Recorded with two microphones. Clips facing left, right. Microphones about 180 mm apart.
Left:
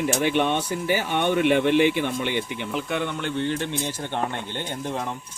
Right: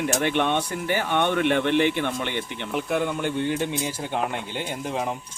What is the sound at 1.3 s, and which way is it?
Speech, 10° left (ahead or behind).